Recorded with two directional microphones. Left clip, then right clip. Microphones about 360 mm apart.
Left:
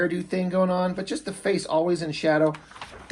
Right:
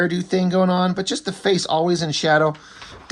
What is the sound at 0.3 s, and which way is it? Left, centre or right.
Speech, right.